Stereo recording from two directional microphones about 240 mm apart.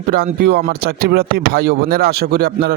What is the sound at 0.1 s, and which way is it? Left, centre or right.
Speech, right.